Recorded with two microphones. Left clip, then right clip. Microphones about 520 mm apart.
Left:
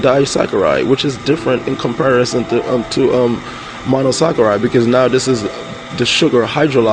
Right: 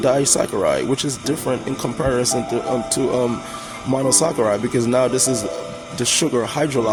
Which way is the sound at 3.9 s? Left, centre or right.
Right.